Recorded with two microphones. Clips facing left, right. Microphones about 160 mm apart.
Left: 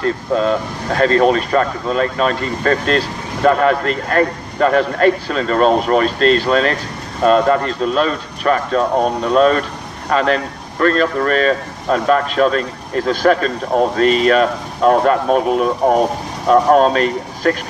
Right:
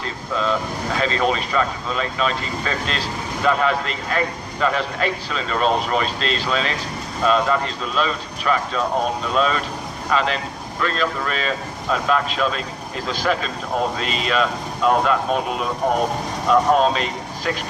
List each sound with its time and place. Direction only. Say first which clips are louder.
0.0 s speech: left 8 dB; 50° left (ahead or behind)